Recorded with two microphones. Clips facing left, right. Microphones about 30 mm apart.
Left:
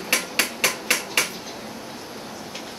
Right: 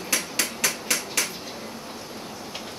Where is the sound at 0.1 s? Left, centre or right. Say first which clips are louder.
Left 4 dB; left.